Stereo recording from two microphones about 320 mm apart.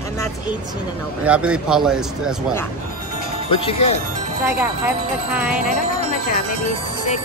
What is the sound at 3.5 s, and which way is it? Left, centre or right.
Speech, centre.